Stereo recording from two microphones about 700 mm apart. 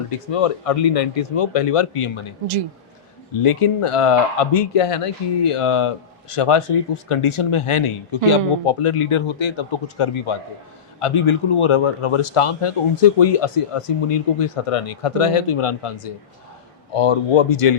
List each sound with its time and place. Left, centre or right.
0.1 s speech: left
3.4 s speech: left